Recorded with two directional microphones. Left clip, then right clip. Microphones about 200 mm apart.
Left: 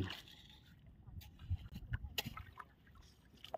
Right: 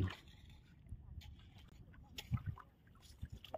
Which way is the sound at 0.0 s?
50° left (ahead or behind).